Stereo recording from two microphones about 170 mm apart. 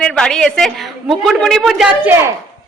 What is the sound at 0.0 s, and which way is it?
A woman's voice, 5° left (ahead or behind).